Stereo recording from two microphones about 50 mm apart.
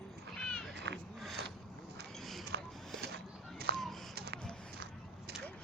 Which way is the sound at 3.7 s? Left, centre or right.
Centre.